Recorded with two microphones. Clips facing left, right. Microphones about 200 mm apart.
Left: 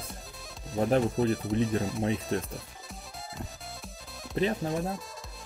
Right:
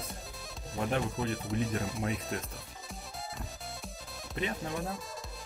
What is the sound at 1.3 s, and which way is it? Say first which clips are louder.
Speech: left 5 dB; centre (ahead or behind).